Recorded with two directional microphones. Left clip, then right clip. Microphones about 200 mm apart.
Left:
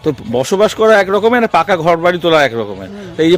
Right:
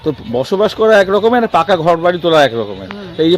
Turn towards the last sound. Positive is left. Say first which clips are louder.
# left 1 dB
turn(degrees=25)  # may be behind; listen again after turning